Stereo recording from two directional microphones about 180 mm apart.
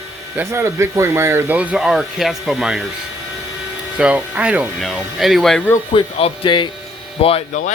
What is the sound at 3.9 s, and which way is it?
Speech, 5° right (ahead or behind).